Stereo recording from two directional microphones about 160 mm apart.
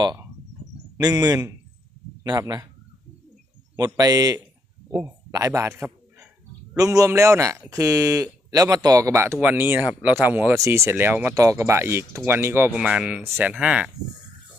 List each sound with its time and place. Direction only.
0.9 s a man's voice: 25° right (ahead or behind)
3.8 s a man's voice: 25° right (ahead or behind); by 13.9 s 5° right (ahead or behind)